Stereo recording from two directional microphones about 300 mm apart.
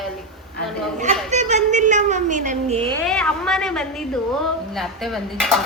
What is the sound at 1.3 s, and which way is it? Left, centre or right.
A woman's voice, right.